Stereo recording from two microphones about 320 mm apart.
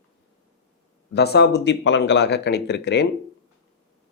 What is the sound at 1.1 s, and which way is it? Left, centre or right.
Speech, left.